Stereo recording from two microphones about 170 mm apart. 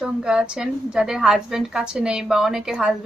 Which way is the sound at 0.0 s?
5° right (ahead or behind).